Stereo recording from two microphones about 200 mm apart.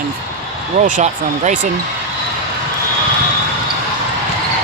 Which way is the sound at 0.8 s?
40° right (ahead or behind).